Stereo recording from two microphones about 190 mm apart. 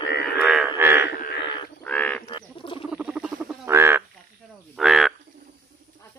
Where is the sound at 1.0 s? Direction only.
60° left (ahead or behind).